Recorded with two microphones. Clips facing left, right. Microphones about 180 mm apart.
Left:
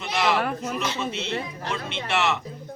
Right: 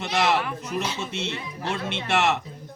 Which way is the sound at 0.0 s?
45° right (ahead or behind).